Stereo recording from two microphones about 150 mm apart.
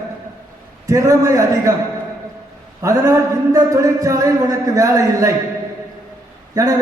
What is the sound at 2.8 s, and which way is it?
A man's voice, 20° right (ahead or behind).